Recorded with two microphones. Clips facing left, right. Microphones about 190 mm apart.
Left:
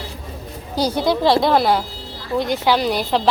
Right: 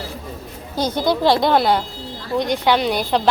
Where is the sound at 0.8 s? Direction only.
10° left (ahead or behind).